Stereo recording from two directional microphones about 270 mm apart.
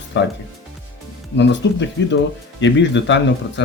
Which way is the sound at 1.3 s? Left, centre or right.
Left.